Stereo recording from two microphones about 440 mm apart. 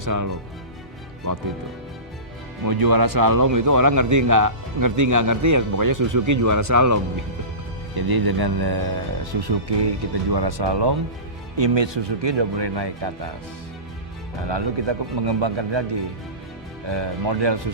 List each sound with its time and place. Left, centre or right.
0.0 s speech: right
2.6 s a man's voice: right
7.9 s a man's voice: right
14.4 s a man's voice: right